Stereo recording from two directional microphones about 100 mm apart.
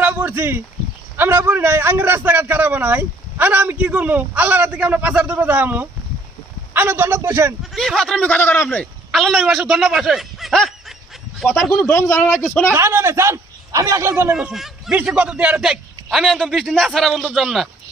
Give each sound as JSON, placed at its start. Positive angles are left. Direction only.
{"t": 0.0, "sound": "a sound", "side_deg": -20}
{"t": 1.1, "sound": "a man's voice", "side_deg": -20}
{"t": 7.7, "sound": "a man's voice", "side_deg": 0}
{"t": 8.2, "sound": "a man's voice", "side_deg": 20}
{"t": 9.1, "sound": "snicker", "side_deg": 0}
{"t": 11.6, "sound": "a man's voice", "side_deg": 5}
{"t": 11.9, "sound": "a man's voice", "side_deg": 25}
{"t": 12.4, "sound": "a man's voice", "side_deg": 15}
{"t": 12.7, "sound": "a man's voice", "side_deg": -25}
{"t": 14.3, "sound": "a man's voice", "side_deg": -5}